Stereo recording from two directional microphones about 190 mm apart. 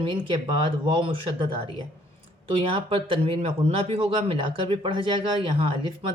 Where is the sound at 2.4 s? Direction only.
30° right (ahead or behind).